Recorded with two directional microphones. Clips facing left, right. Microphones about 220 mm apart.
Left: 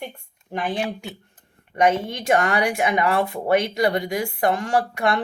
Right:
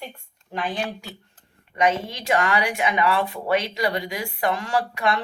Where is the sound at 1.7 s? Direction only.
55° left (ahead or behind).